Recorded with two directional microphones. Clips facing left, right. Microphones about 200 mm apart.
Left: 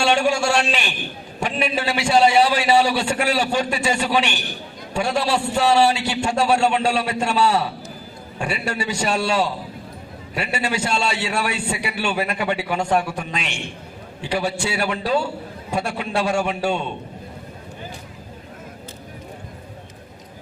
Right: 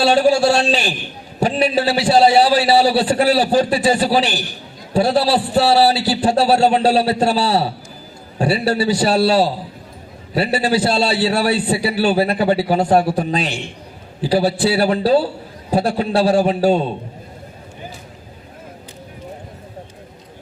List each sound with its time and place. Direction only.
0.0 s a man's voice: 35° right (ahead or behind)